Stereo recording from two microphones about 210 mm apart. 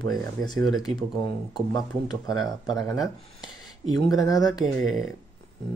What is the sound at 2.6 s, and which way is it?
Speech, 15° left (ahead or behind).